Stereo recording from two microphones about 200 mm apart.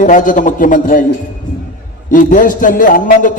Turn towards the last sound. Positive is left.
turn(degrees=40)  # may be behind; listen again after turning